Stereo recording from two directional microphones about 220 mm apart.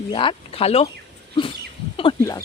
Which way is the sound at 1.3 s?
25° left (ahead or behind).